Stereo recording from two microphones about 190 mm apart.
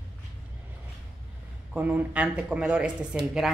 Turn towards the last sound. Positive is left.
turn(degrees=-5)  # may be behind; listen again after turning